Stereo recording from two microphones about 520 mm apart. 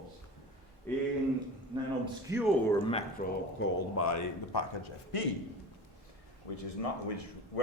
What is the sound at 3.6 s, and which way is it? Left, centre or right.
Speech, left.